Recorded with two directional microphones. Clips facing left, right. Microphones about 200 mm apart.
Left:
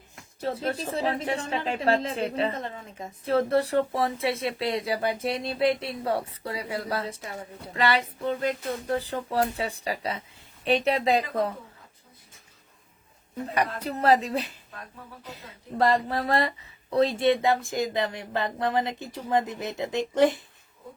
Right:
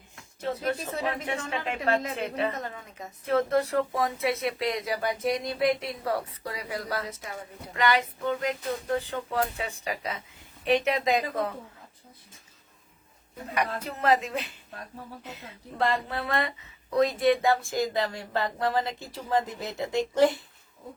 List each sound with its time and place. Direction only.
0.3 s a woman's voice: 30° left (ahead or behind)
13.5 s a woman's voice: 35° left (ahead or behind)